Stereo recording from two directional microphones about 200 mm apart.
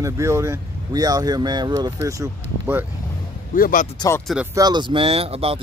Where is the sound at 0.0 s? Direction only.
15° right (ahead or behind).